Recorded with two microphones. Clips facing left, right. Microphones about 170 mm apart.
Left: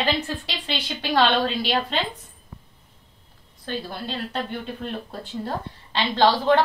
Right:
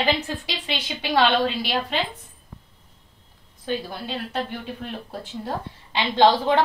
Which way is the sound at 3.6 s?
10° right (ahead or behind).